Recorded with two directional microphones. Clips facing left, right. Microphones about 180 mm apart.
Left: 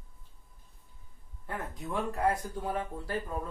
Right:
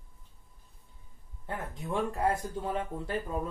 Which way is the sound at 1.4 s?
25° right (ahead or behind).